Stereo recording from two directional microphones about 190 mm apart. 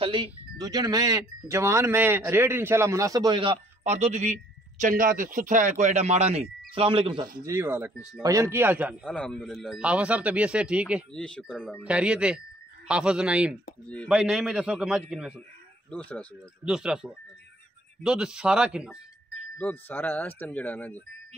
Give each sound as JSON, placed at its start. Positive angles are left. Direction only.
{"t": 0.0, "sound": "speech", "side_deg": -25}
{"t": 7.4, "sound": "speech", "side_deg": -15}
{"t": 9.0, "sound": "speech", "side_deg": 5}
{"t": 11.1, "sound": "speech", "side_deg": 5}
{"t": 15.9, "sound": "speech", "side_deg": 5}
{"t": 19.6, "sound": "speech", "side_deg": 10}